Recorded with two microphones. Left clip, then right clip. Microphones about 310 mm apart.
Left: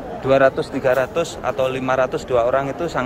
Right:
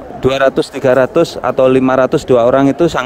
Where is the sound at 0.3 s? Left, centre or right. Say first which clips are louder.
Right 3 dB; right.